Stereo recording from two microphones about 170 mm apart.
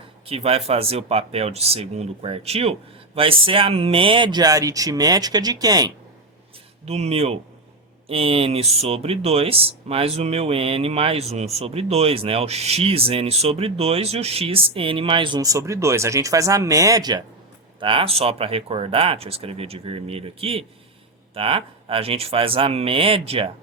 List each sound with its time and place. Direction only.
0.3 s speech: 35° right (ahead or behind)
6.8 s speech: 40° right (ahead or behind)